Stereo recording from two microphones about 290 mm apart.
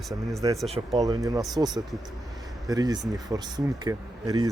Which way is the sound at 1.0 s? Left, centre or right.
Centre.